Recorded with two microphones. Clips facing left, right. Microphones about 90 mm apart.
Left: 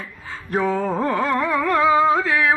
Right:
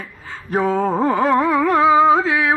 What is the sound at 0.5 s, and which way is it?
Music, 15° right (ahead or behind).